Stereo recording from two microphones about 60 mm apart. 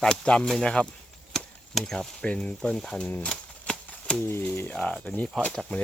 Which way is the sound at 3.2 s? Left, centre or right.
Centre.